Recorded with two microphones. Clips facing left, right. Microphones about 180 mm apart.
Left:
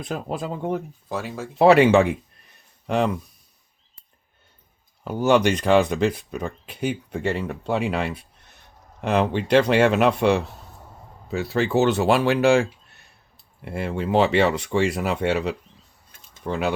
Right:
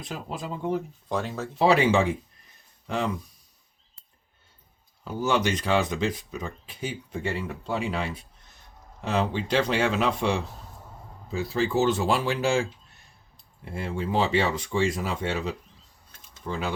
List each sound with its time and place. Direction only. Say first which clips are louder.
0.0 s speech: left 6 dB; 55° left (ahead or behind)
1.0 s speech: even; 5° left (ahead or behind)
1.5 s speech: left 6 dB; 60° left (ahead or behind)
5.0 s speech: left 7 dB; 65° left (ahead or behind)